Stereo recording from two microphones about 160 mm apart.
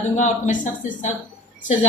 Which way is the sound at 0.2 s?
50° left (ahead or behind).